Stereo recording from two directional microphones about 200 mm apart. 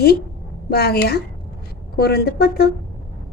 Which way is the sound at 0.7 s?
50° left (ahead or behind).